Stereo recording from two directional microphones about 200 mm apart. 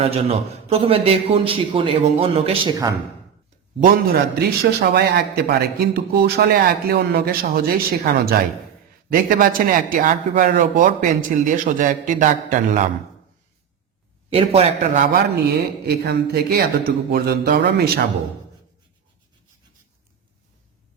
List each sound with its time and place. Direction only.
0.0 s a man's voice: 30° right (ahead or behind)
3.8 s a man's voice: 45° right (ahead or behind)
14.3 s a man's voice: 30° right (ahead or behind); by 18.0 s 50° right (ahead or behind)